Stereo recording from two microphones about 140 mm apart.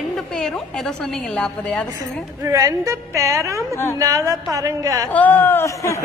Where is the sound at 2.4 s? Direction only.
25° right (ahead or behind).